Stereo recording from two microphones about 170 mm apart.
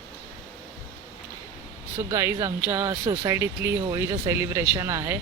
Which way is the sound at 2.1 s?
15° right (ahead or behind).